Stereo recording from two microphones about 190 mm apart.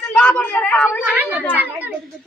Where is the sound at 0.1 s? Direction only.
5° left (ahead or behind).